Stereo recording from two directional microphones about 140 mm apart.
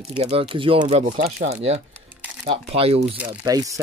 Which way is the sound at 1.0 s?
60° right (ahead or behind).